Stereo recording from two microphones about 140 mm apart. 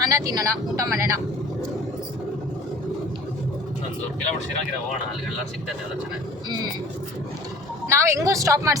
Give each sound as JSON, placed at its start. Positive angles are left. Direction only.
{"t": 0.0, "sound": "speech", "side_deg": -25}
{"t": 7.9, "sound": "speech", "side_deg": -20}